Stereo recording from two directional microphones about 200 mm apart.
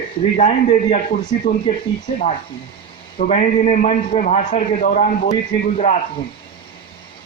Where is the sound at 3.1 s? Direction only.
40° left (ahead or behind).